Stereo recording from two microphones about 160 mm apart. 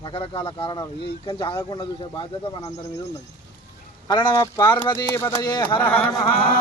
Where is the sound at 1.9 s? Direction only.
35° left (ahead or behind).